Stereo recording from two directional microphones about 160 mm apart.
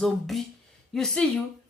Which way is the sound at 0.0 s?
Centre (ahead or behind).